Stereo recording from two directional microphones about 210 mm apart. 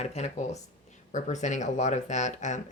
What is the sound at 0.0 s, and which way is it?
Speech, 30° left (ahead or behind).